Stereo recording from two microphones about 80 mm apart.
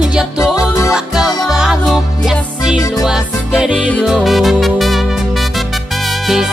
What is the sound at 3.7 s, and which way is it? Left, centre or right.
Music, centre.